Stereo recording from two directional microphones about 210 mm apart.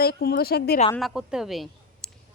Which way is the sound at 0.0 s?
50° left (ahead or behind).